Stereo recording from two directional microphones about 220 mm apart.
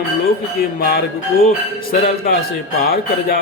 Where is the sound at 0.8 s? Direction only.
45° left (ahead or behind).